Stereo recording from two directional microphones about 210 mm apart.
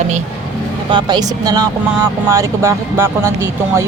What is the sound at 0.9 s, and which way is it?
Speech, 20° right (ahead or behind).